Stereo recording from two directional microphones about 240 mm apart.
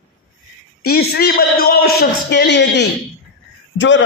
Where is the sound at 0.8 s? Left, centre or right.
Left.